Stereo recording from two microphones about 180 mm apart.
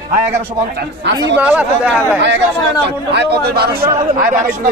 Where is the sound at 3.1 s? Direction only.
60° right (ahead or behind).